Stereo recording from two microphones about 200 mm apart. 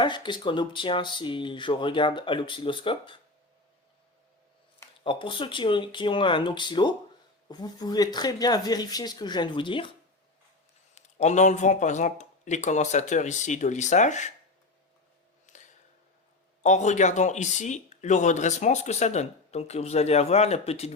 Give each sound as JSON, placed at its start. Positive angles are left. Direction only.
{"t": 0.0, "sound": "speech", "side_deg": 25}
{"t": 5.0, "sound": "speech", "side_deg": 25}
{"t": 10.9, "sound": "speech", "side_deg": 35}
{"t": 15.5, "sound": "a sound", "side_deg": 40}
{"t": 16.6, "sound": "speech", "side_deg": 35}